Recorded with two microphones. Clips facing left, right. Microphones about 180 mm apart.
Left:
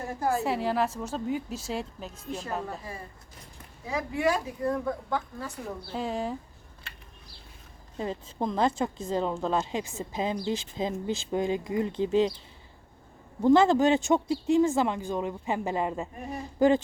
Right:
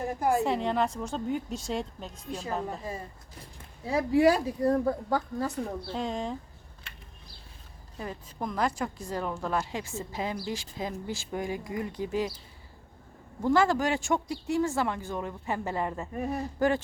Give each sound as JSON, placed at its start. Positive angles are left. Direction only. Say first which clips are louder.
{"t": 0.1, "sound": "a woman's voice", "louder": "right 1 dB", "side_deg": -15}
{"t": 0.4, "sound": "speech", "louder": "even", "side_deg": 5}
{"t": 2.6, "sound": "a woman's voice", "louder": "right 2 dB", "side_deg": -20}
{"t": 3.8, "sound": "speech", "louder": "right 5 dB", "side_deg": -35}
{"t": 5.9, "sound": "speech", "louder": "left 4 dB", "side_deg": 5}
{"t": 7.9, "sound": "speech", "louder": "left 5 dB", "side_deg": 25}
{"t": 13.4, "sound": "speech", "louder": "left 5 dB", "side_deg": 20}